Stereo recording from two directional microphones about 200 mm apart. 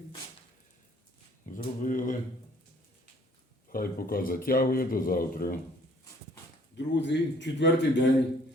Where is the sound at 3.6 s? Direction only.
45° left (ahead or behind).